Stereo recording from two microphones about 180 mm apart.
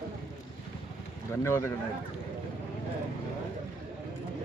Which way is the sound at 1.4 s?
15° left (ahead or behind).